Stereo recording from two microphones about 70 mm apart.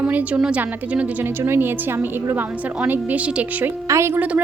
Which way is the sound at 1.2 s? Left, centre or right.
Right.